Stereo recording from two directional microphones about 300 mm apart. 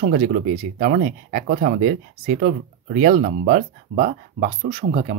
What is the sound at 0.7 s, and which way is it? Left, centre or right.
Speech, right.